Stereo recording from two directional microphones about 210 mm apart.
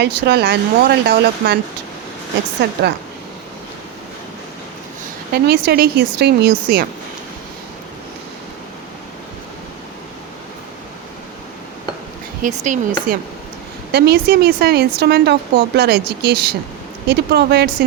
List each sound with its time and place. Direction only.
0.0 s speech: 50° right (ahead or behind)
2.6 s speech: 55° right (ahead or behind)
5.3 s speech: 50° right (ahead or behind)
12.4 s speech: 35° right (ahead or behind)
13.9 s speech: 50° right (ahead or behind)